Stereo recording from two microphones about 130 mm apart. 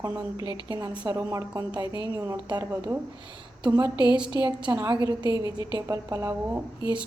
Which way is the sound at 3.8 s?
30° left (ahead or behind).